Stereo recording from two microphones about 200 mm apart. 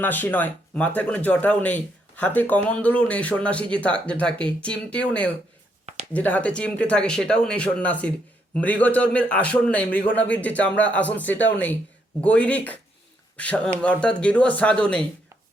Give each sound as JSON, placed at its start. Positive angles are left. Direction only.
{"t": 0.0, "sound": "speech", "side_deg": 10}
{"t": 11.3, "sound": "speech", "side_deg": 65}
{"t": 12.2, "sound": "speech", "side_deg": 5}